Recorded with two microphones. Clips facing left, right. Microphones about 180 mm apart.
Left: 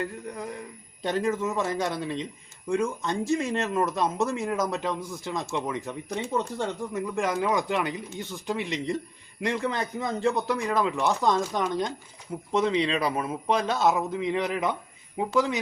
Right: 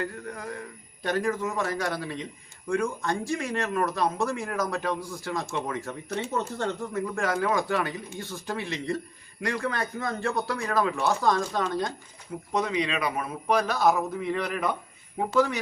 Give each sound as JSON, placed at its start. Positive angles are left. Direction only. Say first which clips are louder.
{"t": 0.0, "sound": "speech", "louder": "left 1 dB", "side_deg": 20}
{"t": 12.5, "sound": "speech", "louder": "left 3 dB", "side_deg": 30}